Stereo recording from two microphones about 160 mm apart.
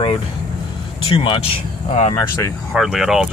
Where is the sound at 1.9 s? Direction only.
40° left (ahead or behind).